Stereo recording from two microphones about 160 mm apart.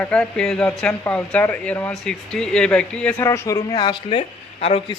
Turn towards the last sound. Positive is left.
turn(degrees=35)  # may be behind; listen again after turning